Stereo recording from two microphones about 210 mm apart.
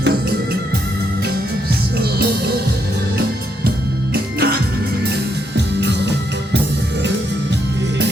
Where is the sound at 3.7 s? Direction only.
45° right (ahead or behind).